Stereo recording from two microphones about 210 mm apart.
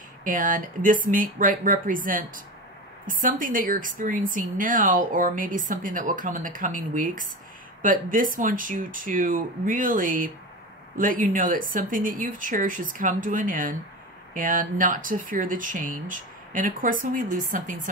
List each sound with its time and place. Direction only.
0.2 s a woman's voice: 40° right (ahead or behind)